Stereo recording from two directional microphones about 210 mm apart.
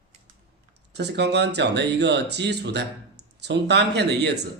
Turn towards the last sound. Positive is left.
turn(degrees=-55)  # may be behind; listen again after turning